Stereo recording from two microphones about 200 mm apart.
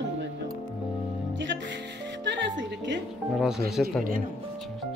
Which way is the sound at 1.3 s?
65° right (ahead or behind).